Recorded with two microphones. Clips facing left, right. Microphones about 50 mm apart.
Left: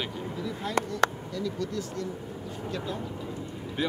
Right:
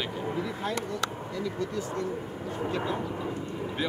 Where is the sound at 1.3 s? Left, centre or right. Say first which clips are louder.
Even; right.